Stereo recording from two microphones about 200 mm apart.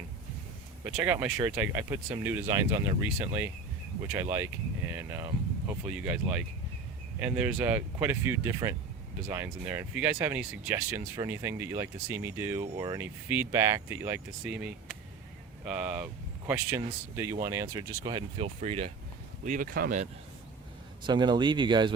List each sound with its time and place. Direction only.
0.9 s speech: 10° right (ahead or behind)
7.3 s speech: 10° right (ahead or behind); by 18.9 s 30° right (ahead or behind)
19.5 s speech: 45° right (ahead or behind)
21.0 s speech: 20° right (ahead or behind)